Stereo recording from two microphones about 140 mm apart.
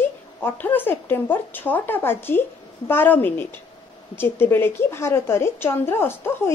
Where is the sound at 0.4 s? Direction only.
15° left (ahead or behind).